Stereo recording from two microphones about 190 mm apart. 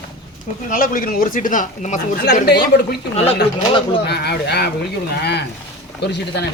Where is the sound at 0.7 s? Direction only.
45° left (ahead or behind).